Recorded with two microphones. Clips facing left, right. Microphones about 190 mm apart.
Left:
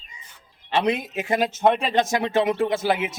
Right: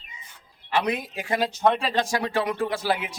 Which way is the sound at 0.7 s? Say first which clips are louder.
Left 3 dB; 25° left (ahead or behind).